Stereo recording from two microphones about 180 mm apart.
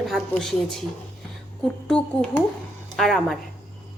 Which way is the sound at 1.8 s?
5° left (ahead or behind).